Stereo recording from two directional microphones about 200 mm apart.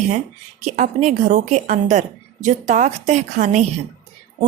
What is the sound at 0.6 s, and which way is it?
Speech, 35° right (ahead or behind).